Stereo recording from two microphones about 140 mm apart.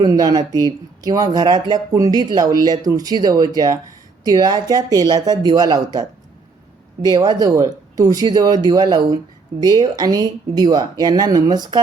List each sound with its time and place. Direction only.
0.0 s speech: 30° right (ahead or behind)